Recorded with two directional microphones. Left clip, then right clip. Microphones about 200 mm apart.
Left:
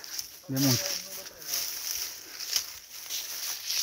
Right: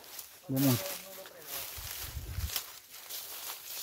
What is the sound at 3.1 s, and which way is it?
Walk, 55° right (ahead or behind).